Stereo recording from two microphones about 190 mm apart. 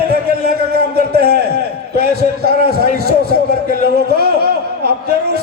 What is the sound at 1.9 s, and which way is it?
A man's voice, 55° right (ahead or behind).